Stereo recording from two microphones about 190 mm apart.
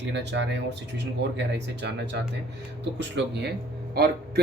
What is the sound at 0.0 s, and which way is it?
Speech, 65° right (ahead or behind).